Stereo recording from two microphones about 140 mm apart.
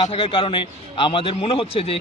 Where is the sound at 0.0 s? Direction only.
40° left (ahead or behind).